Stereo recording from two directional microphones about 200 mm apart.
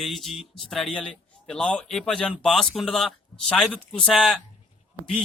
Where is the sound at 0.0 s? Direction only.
Centre (ahead or behind).